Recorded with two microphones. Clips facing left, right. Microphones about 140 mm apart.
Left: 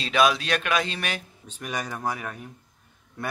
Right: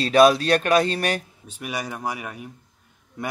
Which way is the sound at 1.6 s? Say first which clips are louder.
Right 1 dB; 10° right (ahead or behind).